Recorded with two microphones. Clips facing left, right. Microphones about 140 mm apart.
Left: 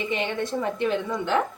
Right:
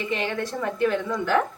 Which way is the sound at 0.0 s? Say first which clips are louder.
Even; 20° left (ahead or behind).